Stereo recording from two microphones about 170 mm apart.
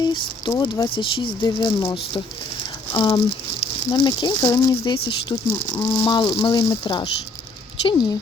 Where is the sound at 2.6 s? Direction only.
30° left (ahead or behind).